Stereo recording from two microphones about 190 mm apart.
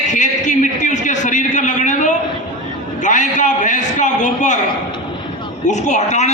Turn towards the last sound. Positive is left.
turn(degrees=40)  # may be behind; listen again after turning